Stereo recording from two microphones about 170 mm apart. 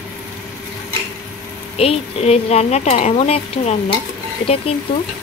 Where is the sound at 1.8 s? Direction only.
35° left (ahead or behind).